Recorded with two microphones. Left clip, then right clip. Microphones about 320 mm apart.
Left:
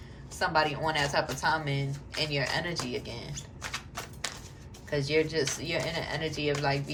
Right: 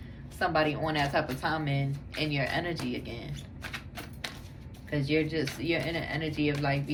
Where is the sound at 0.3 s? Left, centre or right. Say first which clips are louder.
Even; centre.